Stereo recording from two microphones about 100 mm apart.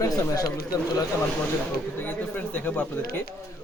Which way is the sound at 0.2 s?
35° left (ahead or behind).